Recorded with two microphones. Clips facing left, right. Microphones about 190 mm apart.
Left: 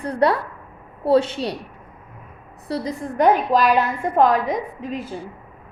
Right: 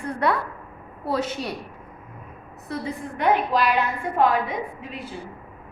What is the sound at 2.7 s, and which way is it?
A woman's voice, 40° left (ahead or behind).